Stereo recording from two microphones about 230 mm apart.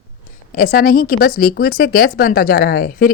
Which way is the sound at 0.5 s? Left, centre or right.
Left.